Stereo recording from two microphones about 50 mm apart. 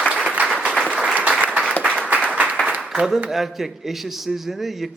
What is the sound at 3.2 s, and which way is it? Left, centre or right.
A man's voice, centre.